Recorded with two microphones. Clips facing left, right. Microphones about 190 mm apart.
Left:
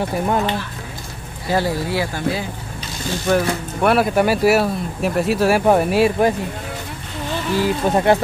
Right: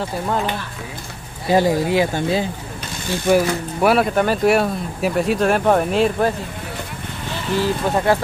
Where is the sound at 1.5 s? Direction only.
15° right (ahead or behind).